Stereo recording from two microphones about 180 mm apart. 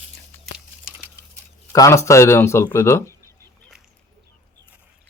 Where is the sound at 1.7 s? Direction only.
15° left (ahead or behind).